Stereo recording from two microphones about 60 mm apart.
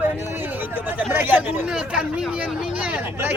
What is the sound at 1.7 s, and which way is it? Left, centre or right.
Speech, centre.